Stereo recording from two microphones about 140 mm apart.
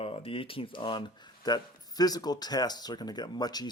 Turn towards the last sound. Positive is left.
turn(degrees=30)  # may be behind; listen again after turning